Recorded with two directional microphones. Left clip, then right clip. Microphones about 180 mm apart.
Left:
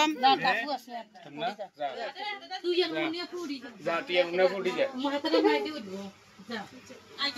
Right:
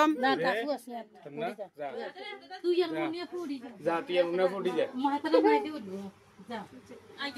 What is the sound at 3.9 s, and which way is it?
Speech, 80° right.